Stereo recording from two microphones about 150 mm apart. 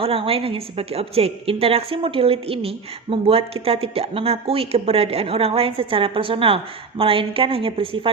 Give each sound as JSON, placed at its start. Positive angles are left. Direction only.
{"t": 0.0, "sound": "a woman's voice", "side_deg": -40}